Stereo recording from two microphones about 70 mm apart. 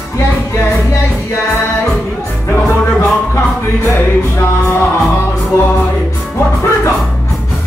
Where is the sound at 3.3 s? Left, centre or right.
Left.